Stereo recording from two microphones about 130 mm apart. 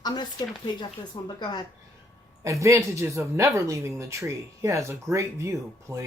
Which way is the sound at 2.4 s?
25° right (ahead or behind).